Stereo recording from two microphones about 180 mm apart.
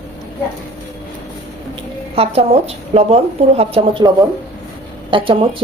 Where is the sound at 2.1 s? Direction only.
35° right (ahead or behind).